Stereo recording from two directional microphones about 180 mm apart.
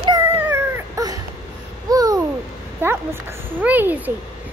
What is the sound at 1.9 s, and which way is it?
Babbling, 20° right (ahead or behind).